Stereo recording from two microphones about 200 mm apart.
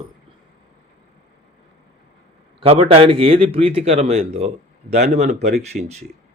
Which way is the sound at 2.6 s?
30° right (ahead or behind).